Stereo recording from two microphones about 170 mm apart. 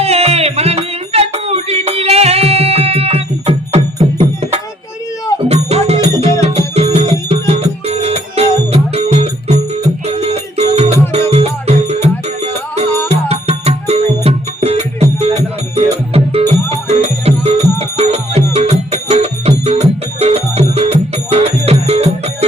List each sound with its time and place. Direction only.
0.0 s music: 35° right (ahead or behind)